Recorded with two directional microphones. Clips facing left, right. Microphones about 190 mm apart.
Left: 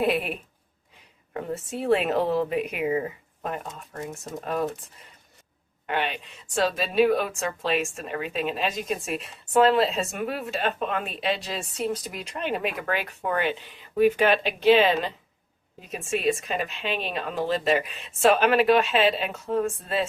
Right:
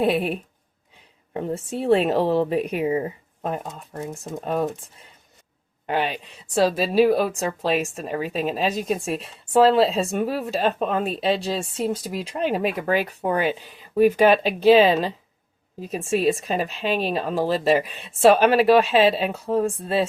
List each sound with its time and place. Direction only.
0.0 s a woman's voice: 35° right (ahead or behind)
5.8 s speech: 35° right (ahead or behind)